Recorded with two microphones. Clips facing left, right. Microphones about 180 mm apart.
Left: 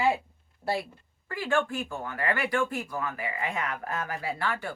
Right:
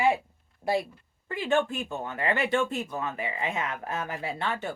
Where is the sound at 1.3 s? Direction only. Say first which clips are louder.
Right 2 dB; 20° right (ahead or behind).